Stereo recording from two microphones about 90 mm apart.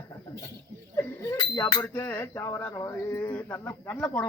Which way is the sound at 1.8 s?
25° left (ahead or behind).